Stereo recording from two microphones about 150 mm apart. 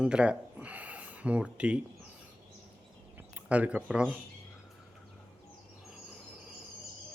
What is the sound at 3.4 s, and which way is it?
Speech, 10° right (ahead or behind).